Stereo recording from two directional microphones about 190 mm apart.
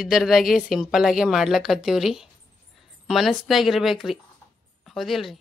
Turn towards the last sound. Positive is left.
turn(degrees=0)  # may be behind; listen again after turning